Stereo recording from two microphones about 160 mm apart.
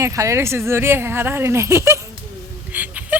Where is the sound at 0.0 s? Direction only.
20° right (ahead or behind).